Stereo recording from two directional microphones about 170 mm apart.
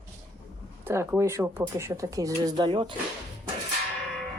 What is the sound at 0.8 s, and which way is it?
Speech, 15° right (ahead or behind).